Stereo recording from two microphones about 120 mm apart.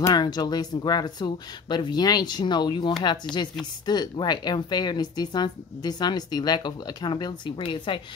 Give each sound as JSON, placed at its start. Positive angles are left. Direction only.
{"t": 0.0, "sound": "a woman's voice", "side_deg": 35}